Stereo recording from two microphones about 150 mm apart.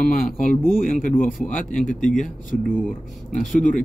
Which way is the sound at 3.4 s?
60° left (ahead or behind).